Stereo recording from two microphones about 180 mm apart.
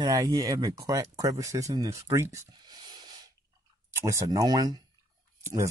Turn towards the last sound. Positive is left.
turn(degrees=-15)  # may be behind; listen again after turning